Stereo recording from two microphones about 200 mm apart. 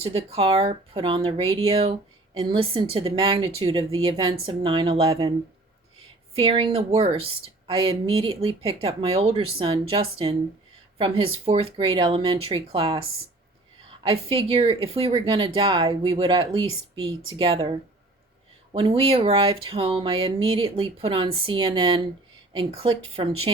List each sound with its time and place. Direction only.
0.0 s speech: 30° right (ahead or behind)
6.3 s speech: 30° right (ahead or behind)
14.0 s speech: 30° right (ahead or behind)